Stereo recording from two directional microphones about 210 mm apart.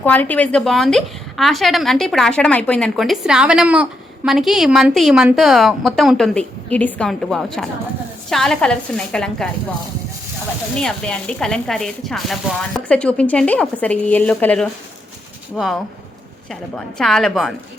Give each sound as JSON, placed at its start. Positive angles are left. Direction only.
{"t": 0.0, "sound": "a woman's voice", "side_deg": 10}
{"t": 10.8, "sound": "a woman's voice", "side_deg": 5}